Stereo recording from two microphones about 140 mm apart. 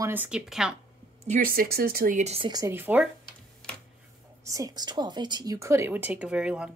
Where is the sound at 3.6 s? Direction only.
5° left (ahead or behind).